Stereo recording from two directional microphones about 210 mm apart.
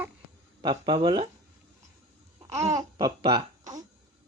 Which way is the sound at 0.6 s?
25° right (ahead or behind).